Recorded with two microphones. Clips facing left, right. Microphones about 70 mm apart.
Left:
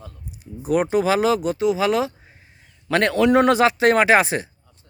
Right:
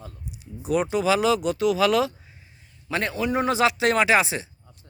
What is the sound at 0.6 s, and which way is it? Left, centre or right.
A man's voice, left.